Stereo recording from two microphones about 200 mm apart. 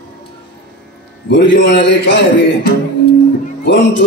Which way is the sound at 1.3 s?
65° left (ahead or behind).